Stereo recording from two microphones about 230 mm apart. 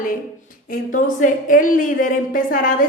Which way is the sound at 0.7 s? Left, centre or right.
Left.